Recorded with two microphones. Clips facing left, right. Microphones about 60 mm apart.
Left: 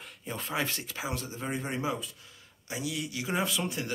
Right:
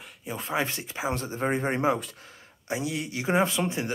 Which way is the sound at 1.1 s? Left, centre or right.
Right.